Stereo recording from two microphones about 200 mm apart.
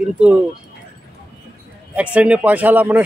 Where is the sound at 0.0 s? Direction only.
5° right (ahead or behind).